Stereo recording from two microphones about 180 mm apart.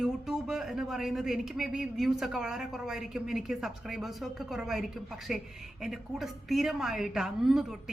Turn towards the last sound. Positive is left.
turn(degrees=0)  # may be behind; listen again after turning